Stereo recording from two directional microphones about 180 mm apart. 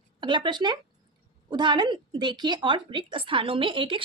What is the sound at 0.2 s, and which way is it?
A woman's voice, 25° right (ahead or behind).